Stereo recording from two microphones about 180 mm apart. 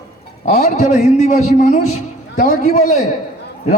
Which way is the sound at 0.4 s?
40° left (ahead or behind).